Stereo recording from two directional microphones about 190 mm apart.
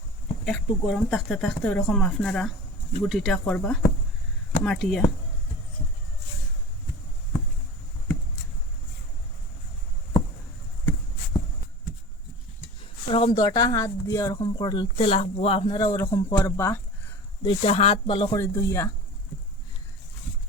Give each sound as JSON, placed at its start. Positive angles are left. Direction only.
{"t": 0.4, "sound": "speech", "side_deg": 0}
{"t": 13.1, "sound": "speech", "side_deg": 30}
{"t": 17.4, "sound": "speech", "side_deg": 30}
{"t": 18.3, "sound": "speech", "side_deg": 15}